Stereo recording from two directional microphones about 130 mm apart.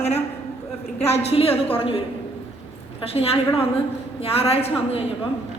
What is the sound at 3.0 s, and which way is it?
A woman's voice, 50° left (ahead or behind).